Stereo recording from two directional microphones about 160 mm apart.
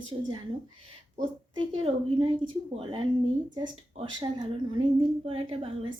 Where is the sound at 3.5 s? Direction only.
30° right (ahead or behind).